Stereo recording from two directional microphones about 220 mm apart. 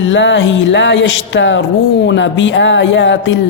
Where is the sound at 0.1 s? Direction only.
55° left (ahead or behind).